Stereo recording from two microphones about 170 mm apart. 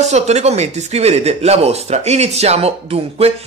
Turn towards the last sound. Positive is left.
turn(degrees=-35)  # may be behind; listen again after turning